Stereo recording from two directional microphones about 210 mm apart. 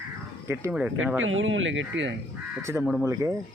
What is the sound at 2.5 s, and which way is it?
Speech, 10° right (ahead or behind).